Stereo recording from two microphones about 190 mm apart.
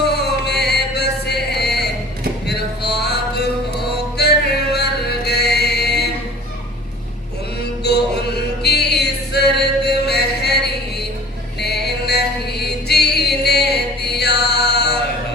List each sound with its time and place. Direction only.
0.0 s music: 60° left (ahead or behind)
7.9 s chant: 60° left (ahead or behind)
8.6 s music: 60° left (ahead or behind)